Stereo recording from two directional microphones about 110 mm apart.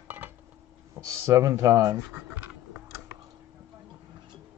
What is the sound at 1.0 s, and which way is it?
Speech, 30° right (ahead or behind).